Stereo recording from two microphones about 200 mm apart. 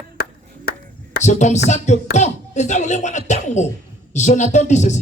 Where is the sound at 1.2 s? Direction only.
35° left (ahead or behind).